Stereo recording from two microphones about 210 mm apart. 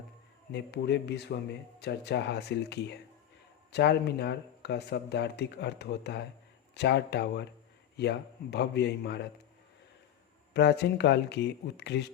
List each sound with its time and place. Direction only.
0.5 s speech: 50° left (ahead or behind)
10.5 s speech: 55° left (ahead or behind)